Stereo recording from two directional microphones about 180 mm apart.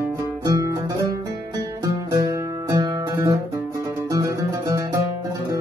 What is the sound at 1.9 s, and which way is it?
Music, 20° right (ahead or behind).